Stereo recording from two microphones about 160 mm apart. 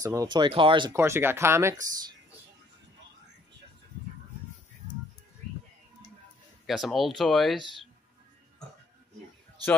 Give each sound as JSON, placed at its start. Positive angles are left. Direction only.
{"t": 0.0, "sound": "speech", "side_deg": -20}
{"t": 0.9, "sound": "speech", "side_deg": -15}
{"t": 6.6, "sound": "speech", "side_deg": 0}